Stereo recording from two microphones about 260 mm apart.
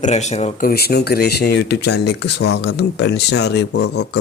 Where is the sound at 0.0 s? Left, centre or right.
Left.